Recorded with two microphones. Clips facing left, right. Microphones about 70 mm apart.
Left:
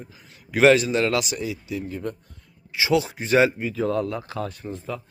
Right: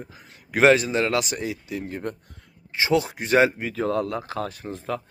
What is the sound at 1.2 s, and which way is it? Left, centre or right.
Speech, right.